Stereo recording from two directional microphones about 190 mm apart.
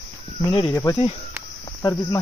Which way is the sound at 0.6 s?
15° left (ahead or behind).